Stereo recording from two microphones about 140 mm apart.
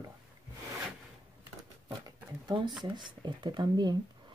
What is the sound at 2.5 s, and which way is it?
Speech, 35° right (ahead or behind).